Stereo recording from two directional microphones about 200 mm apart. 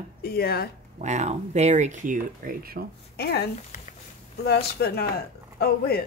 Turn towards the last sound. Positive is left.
turn(degrees=50)  # may be behind; listen again after turning